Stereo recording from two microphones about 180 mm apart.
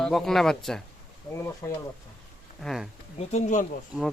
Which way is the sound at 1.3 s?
15° left (ahead or behind).